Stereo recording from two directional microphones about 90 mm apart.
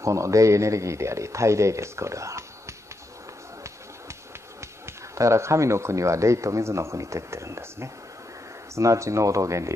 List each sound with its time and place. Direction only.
0.0 s speech: 35° right (ahead or behind)
4.6 s speech: 35° right (ahead or behind)